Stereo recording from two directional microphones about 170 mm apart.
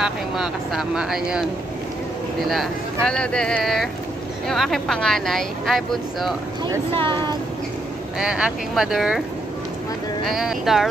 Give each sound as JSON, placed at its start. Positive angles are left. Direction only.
{"t": 0.0, "sound": "speech", "side_deg": -5}
{"t": 2.4, "sound": "speech", "side_deg": 0}
{"t": 6.6, "sound": "speech", "side_deg": -25}
{"t": 8.2, "sound": "speech", "side_deg": -5}
{"t": 10.2, "sound": "speech", "side_deg": 0}